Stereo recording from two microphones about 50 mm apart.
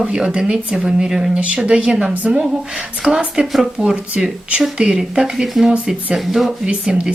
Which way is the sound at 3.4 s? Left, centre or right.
Centre.